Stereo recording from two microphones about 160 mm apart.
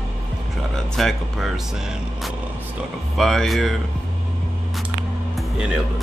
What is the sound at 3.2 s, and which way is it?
Speech, centre (ahead or behind).